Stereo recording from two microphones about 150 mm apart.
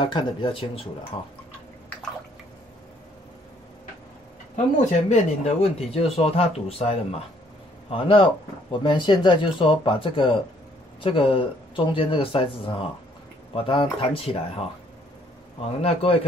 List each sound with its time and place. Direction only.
0.0 s speech: 30° left (ahead or behind)
4.7 s speech: 50° left (ahead or behind)
15.8 s speech: 40° left (ahead or behind)